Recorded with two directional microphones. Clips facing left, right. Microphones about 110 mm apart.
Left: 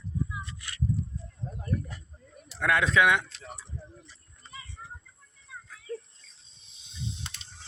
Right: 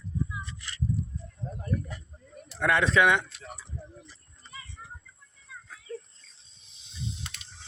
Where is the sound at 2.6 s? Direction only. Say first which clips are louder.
Right 1 dB; centre (ahead or behind).